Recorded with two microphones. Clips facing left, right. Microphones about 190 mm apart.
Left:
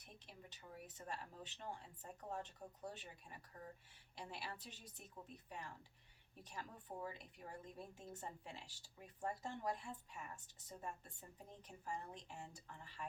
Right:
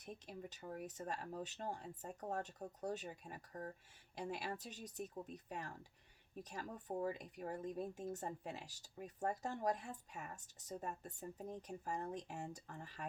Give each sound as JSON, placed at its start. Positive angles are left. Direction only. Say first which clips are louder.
{"t": 0.0, "sound": "speech", "louder": "right 10 dB", "side_deg": -45}
{"t": 6.4, "sound": "speech", "louder": "right 5 dB", "side_deg": -45}